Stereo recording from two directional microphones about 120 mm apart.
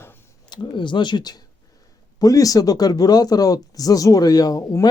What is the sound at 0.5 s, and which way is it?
Speech, 40° left (ahead or behind).